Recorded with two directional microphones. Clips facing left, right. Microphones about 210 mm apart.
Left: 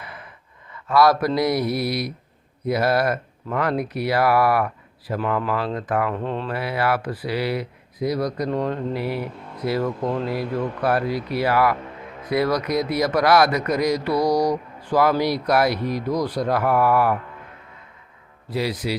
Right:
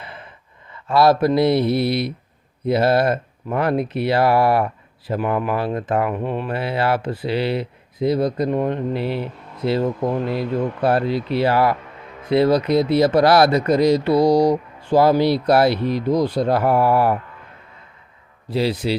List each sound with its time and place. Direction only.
0.0 s gasp: 25° right (ahead or behind)
1.4 s speech: 25° right (ahead or behind)
6.1 s speech: 15° right (ahead or behind)
6.5 s speech: 25° right (ahead or behind)
18.5 s speech: 30° right (ahead or behind)